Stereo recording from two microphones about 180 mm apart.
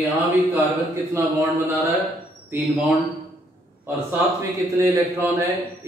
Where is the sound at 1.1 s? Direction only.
15° right (ahead or behind).